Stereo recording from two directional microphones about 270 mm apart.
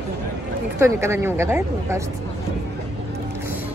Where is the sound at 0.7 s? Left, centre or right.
Centre.